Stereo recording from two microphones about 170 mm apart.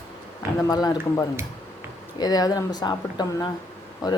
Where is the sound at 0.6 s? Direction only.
20° left (ahead or behind).